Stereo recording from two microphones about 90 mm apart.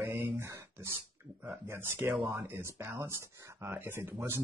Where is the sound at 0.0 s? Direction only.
25° right (ahead or behind).